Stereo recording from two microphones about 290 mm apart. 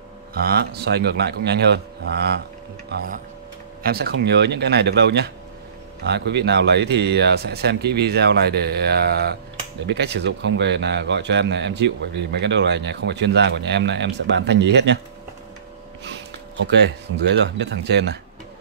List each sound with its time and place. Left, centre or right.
0.3 s a man's voice: right
16.6 s a man's voice: right